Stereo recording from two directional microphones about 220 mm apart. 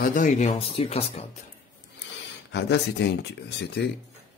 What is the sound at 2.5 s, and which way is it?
Speech, 50° left (ahead or behind).